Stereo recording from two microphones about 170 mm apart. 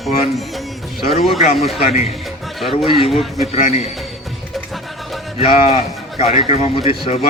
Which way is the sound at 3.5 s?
40° left (ahead or behind).